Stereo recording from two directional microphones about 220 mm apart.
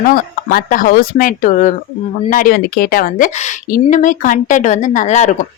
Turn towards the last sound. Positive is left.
turn(degrees=35)  # may be behind; listen again after turning